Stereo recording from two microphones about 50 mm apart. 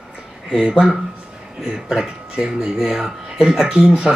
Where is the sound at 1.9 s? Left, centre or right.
Centre.